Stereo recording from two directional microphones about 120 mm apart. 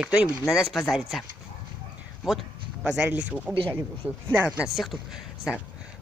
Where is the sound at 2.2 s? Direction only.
5° right (ahead or behind).